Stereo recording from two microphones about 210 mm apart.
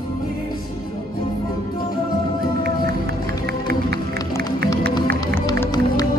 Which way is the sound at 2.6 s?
50° right (ahead or behind).